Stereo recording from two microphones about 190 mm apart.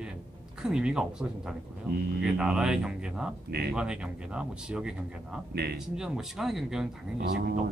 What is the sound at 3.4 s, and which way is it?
Speech, 60° right (ahead or behind).